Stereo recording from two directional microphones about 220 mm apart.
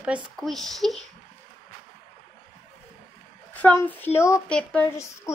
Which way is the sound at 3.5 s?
10° left (ahead or behind).